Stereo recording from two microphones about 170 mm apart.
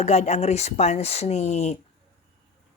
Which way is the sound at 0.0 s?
40° left (ahead or behind).